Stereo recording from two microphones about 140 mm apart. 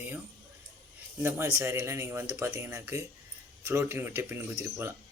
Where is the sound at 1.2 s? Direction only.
20° right (ahead or behind).